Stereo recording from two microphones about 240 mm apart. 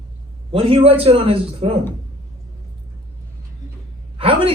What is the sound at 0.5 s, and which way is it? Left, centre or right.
A man's voice, right.